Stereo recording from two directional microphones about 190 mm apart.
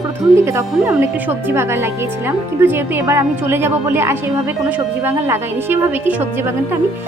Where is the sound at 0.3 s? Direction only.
15° right (ahead or behind).